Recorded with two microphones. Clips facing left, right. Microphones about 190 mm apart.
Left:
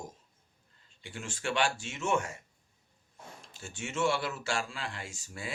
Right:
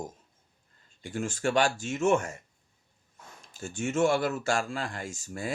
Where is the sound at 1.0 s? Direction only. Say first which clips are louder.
Right 7 dB; 45° right (ahead or behind).